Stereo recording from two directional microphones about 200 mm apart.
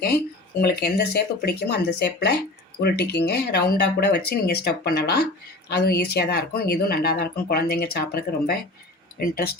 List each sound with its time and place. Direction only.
0.6 s speech: 55° left (ahead or behind)